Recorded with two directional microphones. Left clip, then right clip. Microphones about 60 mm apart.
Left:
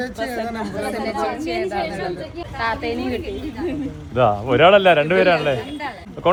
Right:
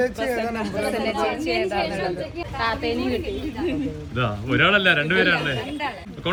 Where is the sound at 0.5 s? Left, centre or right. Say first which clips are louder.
Even; left.